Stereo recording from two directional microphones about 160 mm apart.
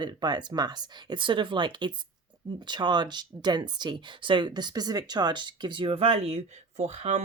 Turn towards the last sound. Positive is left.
turn(degrees=-45)  # may be behind; listen again after turning